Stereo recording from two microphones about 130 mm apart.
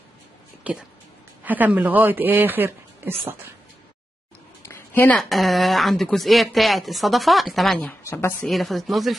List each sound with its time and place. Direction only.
1.4 s speech: 15° right (ahead or behind)
4.6 s a sound: 15° left (ahead or behind)
5.2 s speech: centre (ahead or behind)
8.0 s a woman's voice: 20° left (ahead or behind)
8.5 s speech: centre (ahead or behind)